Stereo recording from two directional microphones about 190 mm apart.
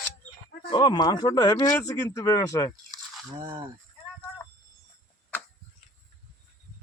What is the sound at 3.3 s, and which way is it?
Speech, 25° right (ahead or behind).